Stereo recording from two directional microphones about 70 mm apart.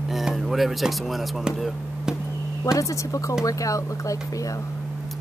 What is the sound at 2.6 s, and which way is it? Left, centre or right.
A woman's voice, left.